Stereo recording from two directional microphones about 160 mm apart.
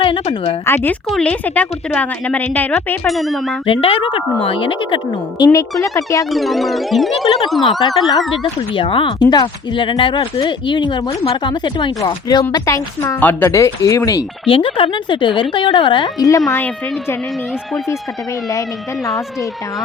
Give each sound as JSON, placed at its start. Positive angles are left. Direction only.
{"t": 0.0, "sound": "speech", "side_deg": 35}
{"t": 0.9, "sound": "speech", "side_deg": 10}
{"t": 3.1, "sound": "speech", "side_deg": 0}
{"t": 3.7, "sound": "speech", "side_deg": 35}
{"t": 5.4, "sound": "speech", "side_deg": 20}
{"t": 6.3, "sound": "speech", "side_deg": 0}
{"t": 8.7, "sound": "speech", "side_deg": 30}
{"t": 14.4, "sound": "speech", "side_deg": 35}